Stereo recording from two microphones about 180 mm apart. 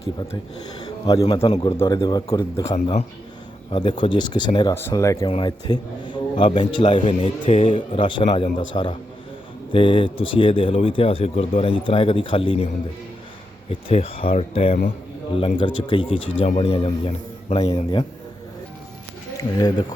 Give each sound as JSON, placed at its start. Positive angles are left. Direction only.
{"t": 0.0, "sound": "speech", "side_deg": 30}
{"t": 0.9, "sound": "a sound", "side_deg": 20}
{"t": 1.2, "sound": "speech", "side_deg": 30}
{"t": 1.7, "sound": "speech", "side_deg": 15}
{"t": 4.7, "sound": "speech", "side_deg": 15}
{"t": 7.9, "sound": "speech", "side_deg": 25}
{"t": 13.7, "sound": "speech", "side_deg": 30}
{"t": 16.4, "sound": "speech", "side_deg": 40}
{"t": 16.6, "sound": "speech", "side_deg": 30}